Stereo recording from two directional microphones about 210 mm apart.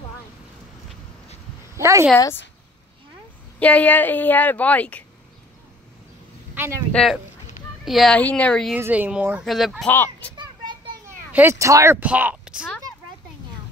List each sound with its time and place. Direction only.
1.8 s speech: 15° right (ahead or behind)
2.1 s speech: 15° left (ahead or behind)
3.5 s speech: 5° left (ahead or behind)
6.5 s a sound: 10° right (ahead or behind)
6.9 s speech: 5° left (ahead or behind)
8.7 s speech: 10° right (ahead or behind); by 10.3 s 10° left (ahead or behind)
10.3 s children playing: 20° right (ahead or behind)
11.3 s speech: 10° right (ahead or behind)